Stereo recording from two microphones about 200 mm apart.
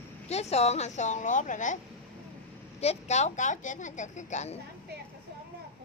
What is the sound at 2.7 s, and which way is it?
A woman's voice, 35° left (ahead or behind).